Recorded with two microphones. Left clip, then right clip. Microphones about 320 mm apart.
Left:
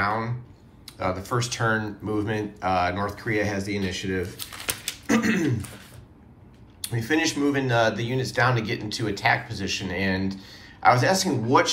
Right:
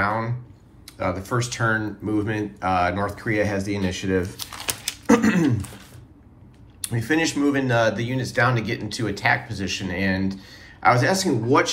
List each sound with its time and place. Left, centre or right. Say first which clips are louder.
0.0 s speech: right 2 dB; centre
4.5 s a sound: right 2 dB; centre
5.0 s speech: right 5 dB; centre
6.8 s speech: right 2 dB; centre